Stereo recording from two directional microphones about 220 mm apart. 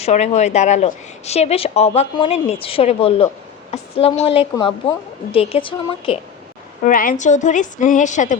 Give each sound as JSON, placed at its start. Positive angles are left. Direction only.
{"t": 0.0, "sound": "a woman's voice", "side_deg": 30}
{"t": 6.8, "sound": "a woman's voice", "side_deg": 40}